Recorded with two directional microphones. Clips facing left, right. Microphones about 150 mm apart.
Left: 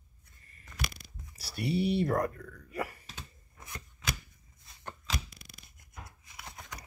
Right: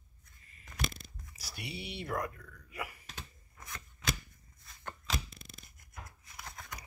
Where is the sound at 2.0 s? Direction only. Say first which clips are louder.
Left 8 dB; 40° left (ahead or behind).